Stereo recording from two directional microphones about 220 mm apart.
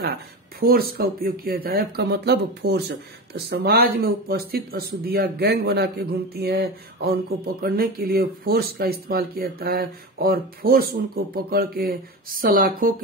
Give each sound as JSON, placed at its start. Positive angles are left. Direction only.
{"t": 0.6, "sound": "speech", "side_deg": -45}